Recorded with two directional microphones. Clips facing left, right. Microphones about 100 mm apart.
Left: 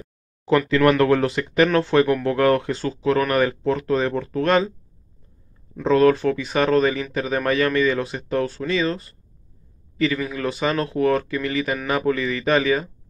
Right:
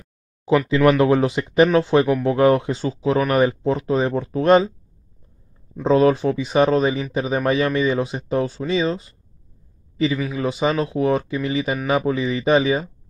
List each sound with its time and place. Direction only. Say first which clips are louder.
0.5 s speech: right 1 dB; 10° right (ahead or behind)
5.8 s speech: even; 20° right (ahead or behind)
10.1 s speech: right 2 dB; 10° right (ahead or behind)